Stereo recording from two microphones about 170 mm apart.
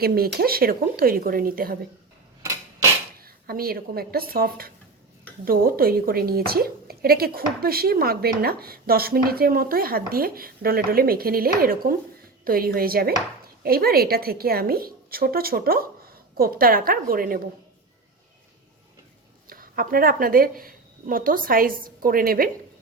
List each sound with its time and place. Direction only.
0.0 s a woman's voice: 65° right (ahead or behind)
3.2 s a woman's voice: 60° right (ahead or behind)
19.5 s speech: 55° right (ahead or behind)